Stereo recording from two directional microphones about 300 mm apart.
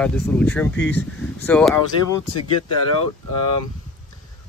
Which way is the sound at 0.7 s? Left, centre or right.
Left.